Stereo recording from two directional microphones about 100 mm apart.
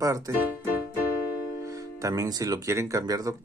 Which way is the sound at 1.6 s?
35° right (ahead or behind).